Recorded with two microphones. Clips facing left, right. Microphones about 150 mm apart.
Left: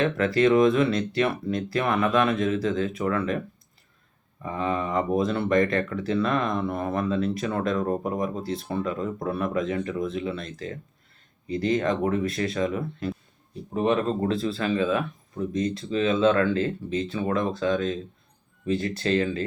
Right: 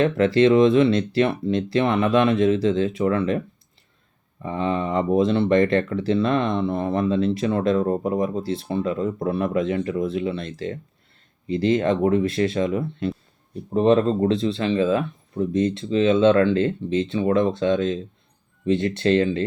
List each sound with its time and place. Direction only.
0.3 s speech: 25° right (ahead or behind)
4.4 s speech: 30° right (ahead or behind)